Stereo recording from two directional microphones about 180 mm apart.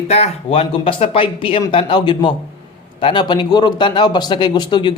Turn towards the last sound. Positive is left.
turn(degrees=25)  # may be behind; listen again after turning